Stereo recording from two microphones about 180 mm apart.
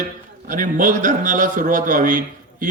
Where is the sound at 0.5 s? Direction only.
50° right (ahead or behind).